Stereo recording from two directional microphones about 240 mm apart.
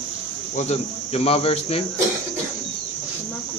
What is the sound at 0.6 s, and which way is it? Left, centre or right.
Speech, left.